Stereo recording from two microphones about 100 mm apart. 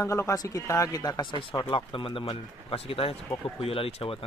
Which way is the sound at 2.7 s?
70° left (ahead or behind).